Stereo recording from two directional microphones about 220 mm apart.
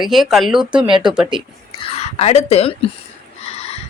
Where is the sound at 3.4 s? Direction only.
30° left (ahead or behind).